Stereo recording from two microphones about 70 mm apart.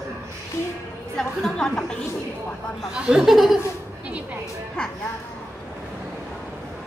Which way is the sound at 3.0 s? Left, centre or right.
Centre.